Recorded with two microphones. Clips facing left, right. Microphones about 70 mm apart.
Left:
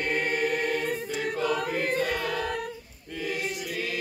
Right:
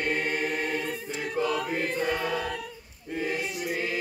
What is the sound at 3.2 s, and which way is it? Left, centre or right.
Chant, right.